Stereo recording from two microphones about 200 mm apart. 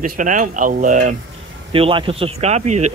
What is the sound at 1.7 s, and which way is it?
Speech, 25° right (ahead or behind).